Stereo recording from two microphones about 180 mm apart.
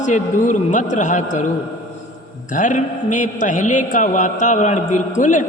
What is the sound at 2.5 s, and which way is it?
A man's voice, 45° left (ahead or behind).